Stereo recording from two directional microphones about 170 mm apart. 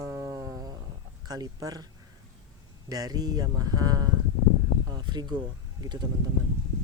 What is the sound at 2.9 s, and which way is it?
Speech, 20° right (ahead or behind).